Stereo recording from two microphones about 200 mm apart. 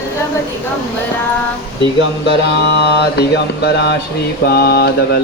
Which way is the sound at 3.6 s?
55° left (ahead or behind).